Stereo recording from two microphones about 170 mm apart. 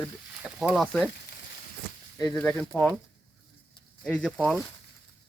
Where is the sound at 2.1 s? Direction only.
15° left (ahead or behind).